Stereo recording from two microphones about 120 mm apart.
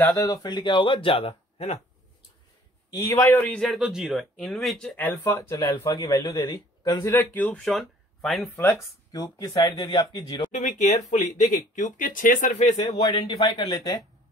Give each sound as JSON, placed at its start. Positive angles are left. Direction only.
{"t": 0.1, "sound": "speech", "side_deg": 30}
{"t": 3.0, "sound": "a man's voice", "side_deg": 20}
{"t": 3.6, "sound": "speech", "side_deg": 0}
{"t": 4.9, "sound": "a man's voice", "side_deg": 15}
{"t": 7.3, "sound": "a man's voice", "side_deg": 15}
{"t": 7.6, "sound": "speech", "side_deg": 0}
{"t": 9.1, "sound": "speech", "side_deg": 30}
{"t": 10.5, "sound": "speech", "side_deg": 90}
{"t": 12.7, "sound": "speech", "side_deg": 60}
{"t": 13.0, "sound": "speech", "side_deg": 35}